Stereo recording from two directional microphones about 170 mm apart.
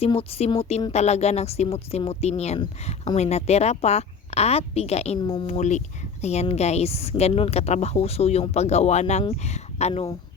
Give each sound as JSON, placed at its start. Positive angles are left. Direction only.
{"t": 0.0, "sound": "speech", "side_deg": 35}
{"t": 5.2, "sound": "speech", "side_deg": 25}
{"t": 5.5, "sound": "speech", "side_deg": 45}